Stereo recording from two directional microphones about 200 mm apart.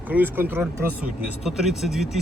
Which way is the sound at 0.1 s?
10° right (ahead or behind).